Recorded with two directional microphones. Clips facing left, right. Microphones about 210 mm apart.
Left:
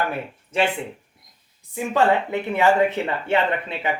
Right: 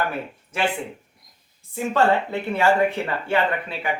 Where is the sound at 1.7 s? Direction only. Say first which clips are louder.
Even; 15° left (ahead or behind).